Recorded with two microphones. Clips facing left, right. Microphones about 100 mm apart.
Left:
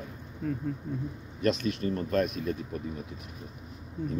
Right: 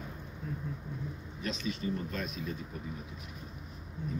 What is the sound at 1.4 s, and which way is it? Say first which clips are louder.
Speech: left 8 dB; 60° left (ahead or behind).